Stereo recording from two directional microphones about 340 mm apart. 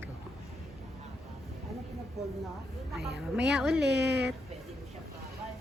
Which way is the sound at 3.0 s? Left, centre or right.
Right.